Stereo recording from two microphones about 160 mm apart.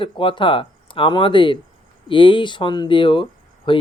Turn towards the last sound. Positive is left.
turn(degrees=30)  # may be behind; listen again after turning